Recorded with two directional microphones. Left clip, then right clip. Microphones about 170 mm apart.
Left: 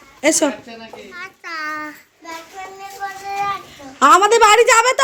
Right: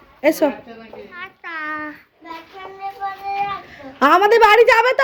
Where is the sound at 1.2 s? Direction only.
35° right (ahead or behind).